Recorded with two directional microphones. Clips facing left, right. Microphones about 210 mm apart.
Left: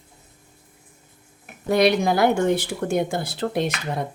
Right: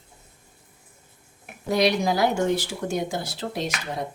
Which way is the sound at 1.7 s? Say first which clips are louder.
Left 3 dB; 55° left (ahead or behind).